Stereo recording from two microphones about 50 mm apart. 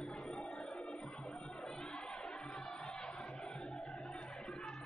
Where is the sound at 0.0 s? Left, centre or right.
Centre.